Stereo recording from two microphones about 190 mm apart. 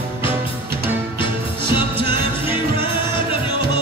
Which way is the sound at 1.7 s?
25° left (ahead or behind).